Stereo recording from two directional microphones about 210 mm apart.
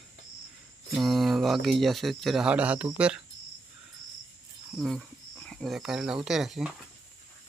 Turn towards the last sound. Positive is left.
turn(degrees=0)  # may be behind; listen again after turning